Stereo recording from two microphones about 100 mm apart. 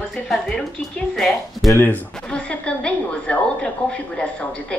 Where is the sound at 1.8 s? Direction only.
15° left (ahead or behind).